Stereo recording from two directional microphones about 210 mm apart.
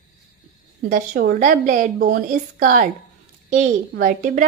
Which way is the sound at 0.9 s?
40° right (ahead or behind).